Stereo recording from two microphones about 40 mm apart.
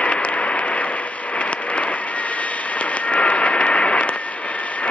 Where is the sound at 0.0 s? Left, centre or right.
Left.